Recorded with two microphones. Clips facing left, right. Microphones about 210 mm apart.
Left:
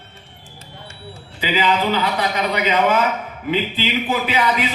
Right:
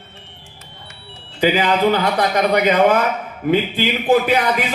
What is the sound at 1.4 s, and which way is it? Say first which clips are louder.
Speech: right 4 dB; 50° right (ahead or behind).